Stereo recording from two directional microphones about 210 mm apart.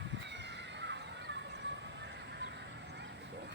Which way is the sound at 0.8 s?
55° right (ahead or behind).